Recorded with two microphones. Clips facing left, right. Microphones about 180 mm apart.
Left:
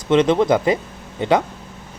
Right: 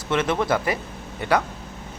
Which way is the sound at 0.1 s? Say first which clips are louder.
Left 7 dB; 20° left (ahead or behind).